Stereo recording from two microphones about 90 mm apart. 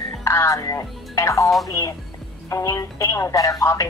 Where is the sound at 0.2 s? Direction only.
35° left (ahead or behind).